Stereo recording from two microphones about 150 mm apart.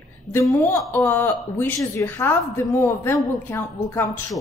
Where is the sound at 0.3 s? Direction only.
15° left (ahead or behind).